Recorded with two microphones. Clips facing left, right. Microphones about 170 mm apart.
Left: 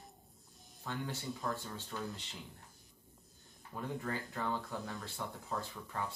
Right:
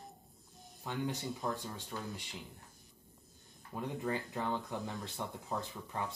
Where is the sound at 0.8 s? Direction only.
20° right (ahead or behind).